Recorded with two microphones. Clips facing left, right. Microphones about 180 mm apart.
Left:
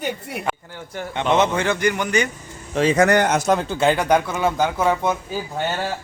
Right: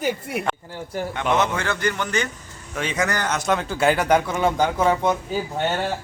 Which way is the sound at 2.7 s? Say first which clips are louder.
Left 8 dB; 35° left (ahead or behind).